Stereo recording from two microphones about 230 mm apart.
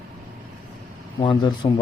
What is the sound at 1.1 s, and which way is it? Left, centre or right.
Speech, centre.